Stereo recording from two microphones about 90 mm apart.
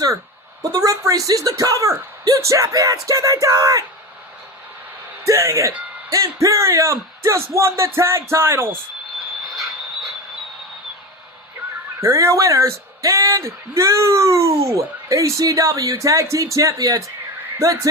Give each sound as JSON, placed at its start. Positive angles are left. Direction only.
{"t": 0.6, "sound": "speech", "side_deg": -40}
{"t": 5.2, "sound": "speech", "side_deg": -35}
{"t": 11.9, "sound": "speech", "side_deg": -35}